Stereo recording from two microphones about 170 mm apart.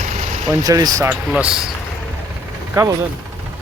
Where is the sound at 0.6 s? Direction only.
20° right (ahead or behind).